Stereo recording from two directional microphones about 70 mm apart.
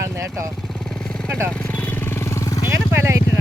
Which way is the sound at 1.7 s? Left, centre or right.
Left.